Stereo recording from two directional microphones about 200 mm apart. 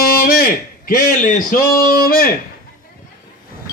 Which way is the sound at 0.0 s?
50° left (ahead or behind).